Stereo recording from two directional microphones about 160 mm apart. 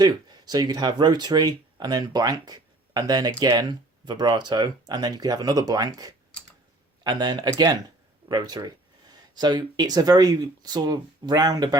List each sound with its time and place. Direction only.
0.0 s speech: 25° right (ahead or behind)